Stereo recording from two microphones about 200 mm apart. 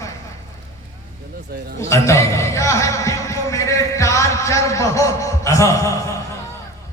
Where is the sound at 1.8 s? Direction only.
15° left (ahead or behind).